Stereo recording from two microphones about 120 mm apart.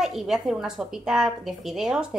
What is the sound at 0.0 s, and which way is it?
A woman's voice, 5° right (ahead or behind).